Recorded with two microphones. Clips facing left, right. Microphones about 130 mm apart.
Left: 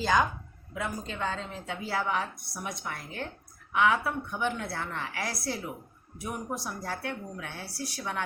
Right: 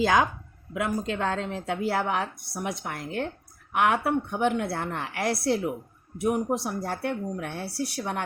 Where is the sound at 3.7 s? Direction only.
65° right (ahead or behind).